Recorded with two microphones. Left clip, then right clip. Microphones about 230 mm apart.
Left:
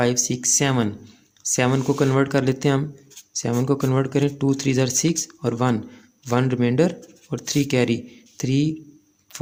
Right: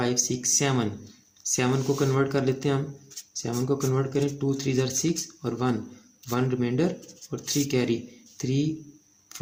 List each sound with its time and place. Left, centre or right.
0.0 s speech: left